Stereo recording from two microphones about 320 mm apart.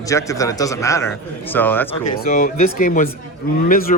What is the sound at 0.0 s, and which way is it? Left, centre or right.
A man's voice, centre.